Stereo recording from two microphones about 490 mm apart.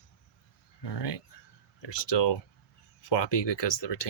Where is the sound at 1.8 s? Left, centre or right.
Left.